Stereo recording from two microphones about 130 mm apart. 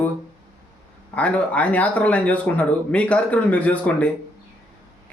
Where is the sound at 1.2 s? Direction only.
10° left (ahead or behind).